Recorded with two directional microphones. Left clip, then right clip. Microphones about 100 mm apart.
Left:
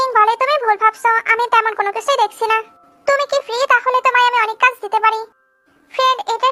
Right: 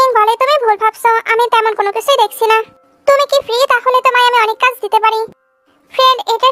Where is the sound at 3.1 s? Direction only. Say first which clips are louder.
Right 6 dB; 40° right (ahead or behind).